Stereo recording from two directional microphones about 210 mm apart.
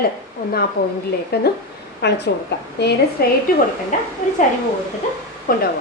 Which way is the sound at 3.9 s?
35° left (ahead or behind).